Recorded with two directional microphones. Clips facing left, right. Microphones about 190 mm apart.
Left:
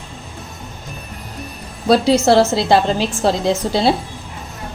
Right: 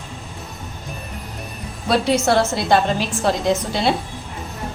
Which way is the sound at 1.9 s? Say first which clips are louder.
Left 5 dB; 30° left (ahead or behind).